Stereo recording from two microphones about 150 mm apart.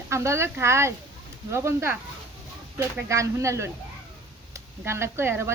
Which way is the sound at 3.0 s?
20° right (ahead or behind).